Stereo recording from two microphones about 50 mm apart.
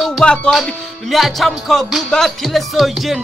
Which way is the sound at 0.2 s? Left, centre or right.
Centre.